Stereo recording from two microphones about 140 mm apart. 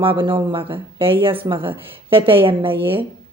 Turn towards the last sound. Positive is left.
turn(degrees=-40)  # may be behind; listen again after turning